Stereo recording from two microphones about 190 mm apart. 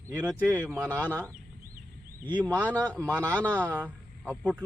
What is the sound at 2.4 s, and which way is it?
Speech, 10° right (ahead or behind).